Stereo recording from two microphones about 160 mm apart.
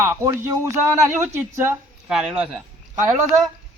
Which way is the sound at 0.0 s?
15° right (ahead or behind).